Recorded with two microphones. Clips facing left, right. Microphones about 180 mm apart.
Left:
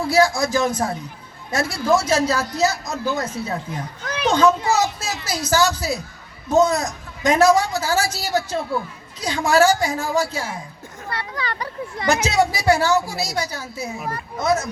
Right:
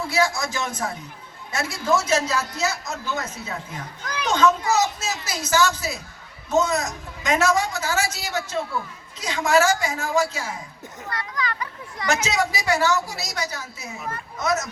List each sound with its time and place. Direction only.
0.1 s speech: 35° left (ahead or behind)